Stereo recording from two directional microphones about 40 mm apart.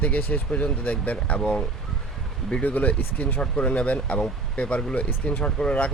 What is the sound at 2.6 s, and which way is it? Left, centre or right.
Speech, left.